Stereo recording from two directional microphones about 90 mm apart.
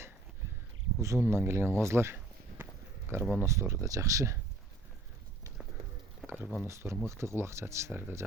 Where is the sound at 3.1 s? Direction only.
30° right (ahead or behind).